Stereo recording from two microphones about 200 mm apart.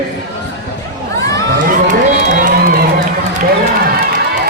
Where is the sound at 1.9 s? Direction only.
40° right (ahead or behind).